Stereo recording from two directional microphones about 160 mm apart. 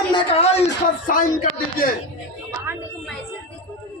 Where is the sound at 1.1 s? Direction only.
60° left (ahead or behind).